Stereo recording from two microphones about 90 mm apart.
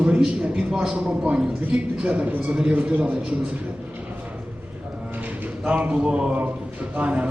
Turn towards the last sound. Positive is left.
turn(degrees=-15)  # may be behind; listen again after turning